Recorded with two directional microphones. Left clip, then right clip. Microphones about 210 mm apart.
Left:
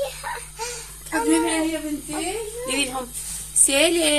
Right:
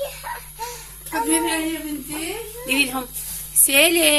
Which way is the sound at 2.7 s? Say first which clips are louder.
Right 6 dB; 10° right (ahead or behind).